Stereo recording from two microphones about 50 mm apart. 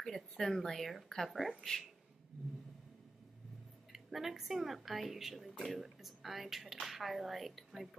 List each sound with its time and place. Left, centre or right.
0.0 s a woman's voice: centre
3.9 s a woman's voice: centre